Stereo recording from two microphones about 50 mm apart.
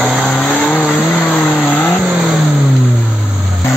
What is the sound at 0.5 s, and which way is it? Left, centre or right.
Vehicle, centre.